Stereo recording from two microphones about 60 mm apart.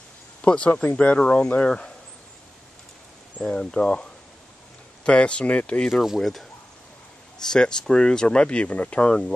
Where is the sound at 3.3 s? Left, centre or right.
Centre.